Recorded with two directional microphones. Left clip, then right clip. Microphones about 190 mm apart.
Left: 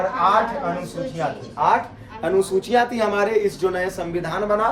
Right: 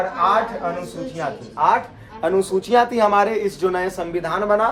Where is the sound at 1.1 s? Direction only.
10° right (ahead or behind).